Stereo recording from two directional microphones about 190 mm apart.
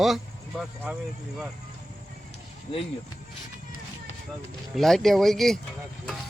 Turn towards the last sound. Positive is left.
turn(degrees=0)  # may be behind; listen again after turning